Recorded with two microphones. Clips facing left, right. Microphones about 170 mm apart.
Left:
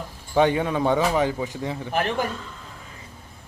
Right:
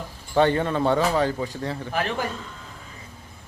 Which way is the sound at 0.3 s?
10° left (ahead or behind).